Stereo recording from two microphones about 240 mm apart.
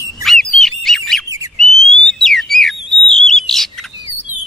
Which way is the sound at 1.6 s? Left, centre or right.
Centre.